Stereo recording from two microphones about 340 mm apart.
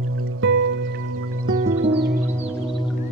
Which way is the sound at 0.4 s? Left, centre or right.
Right.